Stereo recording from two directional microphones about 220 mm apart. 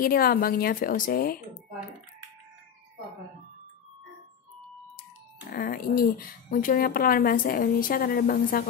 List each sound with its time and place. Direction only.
0.0 s speech: 40° left (ahead or behind)
5.5 s speech: 40° left (ahead or behind)